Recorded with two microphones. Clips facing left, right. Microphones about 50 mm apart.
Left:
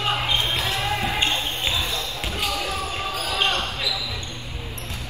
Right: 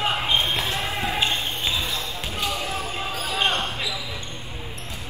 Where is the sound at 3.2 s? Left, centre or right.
Right.